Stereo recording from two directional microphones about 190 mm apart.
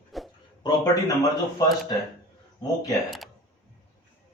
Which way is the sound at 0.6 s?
20° left (ahead or behind).